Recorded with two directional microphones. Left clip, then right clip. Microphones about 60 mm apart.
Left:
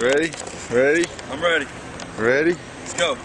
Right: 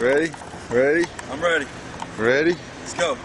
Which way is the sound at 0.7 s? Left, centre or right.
Centre.